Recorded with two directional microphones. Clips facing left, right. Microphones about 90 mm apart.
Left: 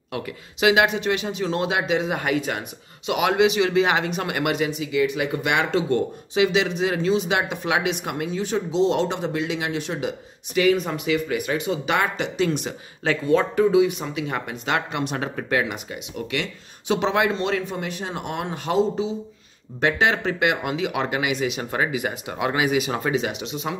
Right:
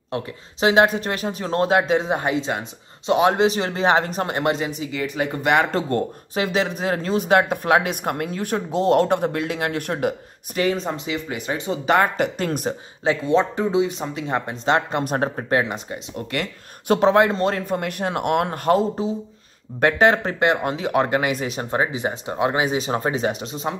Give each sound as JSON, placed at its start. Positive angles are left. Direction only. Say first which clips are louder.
{"t": 0.1, "sound": "speech", "louder": "right 2 dB", "side_deg": -35}
{"t": 13.0, "sound": "speech", "louder": "right 1 dB", "side_deg": -20}
{"t": 17.7, "sound": "speech", "louder": "right 5 dB", "side_deg": -55}